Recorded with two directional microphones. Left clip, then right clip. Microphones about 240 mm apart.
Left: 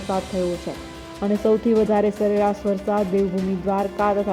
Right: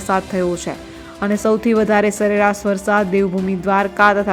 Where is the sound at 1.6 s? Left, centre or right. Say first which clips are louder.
Right 4 dB; centre.